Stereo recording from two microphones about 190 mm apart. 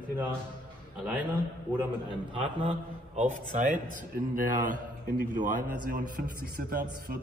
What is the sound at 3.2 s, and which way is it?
A man's voice, 40° right (ahead or behind).